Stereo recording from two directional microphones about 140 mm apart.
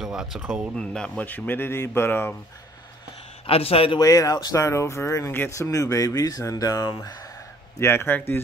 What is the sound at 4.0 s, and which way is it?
A man's voice, 25° left (ahead or behind).